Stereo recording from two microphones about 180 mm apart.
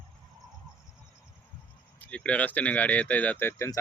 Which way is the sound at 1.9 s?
10° left (ahead or behind).